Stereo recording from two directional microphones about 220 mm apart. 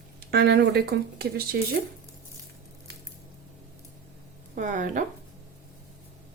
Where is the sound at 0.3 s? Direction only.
50° right (ahead or behind).